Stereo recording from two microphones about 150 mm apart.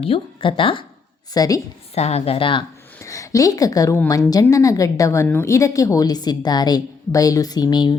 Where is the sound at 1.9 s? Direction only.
45° left (ahead or behind).